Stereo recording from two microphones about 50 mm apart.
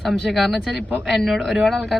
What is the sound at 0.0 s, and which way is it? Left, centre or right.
Speech, centre.